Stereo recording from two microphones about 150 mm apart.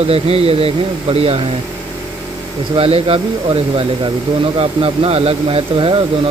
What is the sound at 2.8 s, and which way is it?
Speech, 40° right (ahead or behind).